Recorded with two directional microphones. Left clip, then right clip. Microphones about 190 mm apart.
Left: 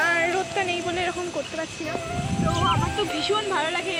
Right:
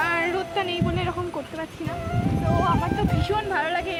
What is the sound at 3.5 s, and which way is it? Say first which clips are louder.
Speech: even; 20° right (ahead or behind).